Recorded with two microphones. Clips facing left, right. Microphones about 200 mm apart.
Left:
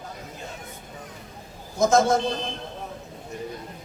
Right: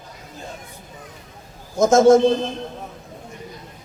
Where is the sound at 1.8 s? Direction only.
50° right (ahead or behind).